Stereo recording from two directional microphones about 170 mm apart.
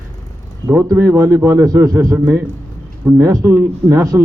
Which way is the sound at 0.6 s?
15° right (ahead or behind).